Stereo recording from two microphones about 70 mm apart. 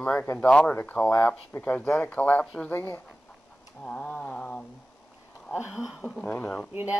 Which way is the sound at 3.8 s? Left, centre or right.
Centre.